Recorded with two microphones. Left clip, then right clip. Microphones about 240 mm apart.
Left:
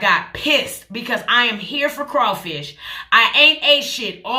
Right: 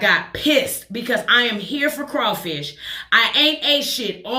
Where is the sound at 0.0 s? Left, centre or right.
Centre.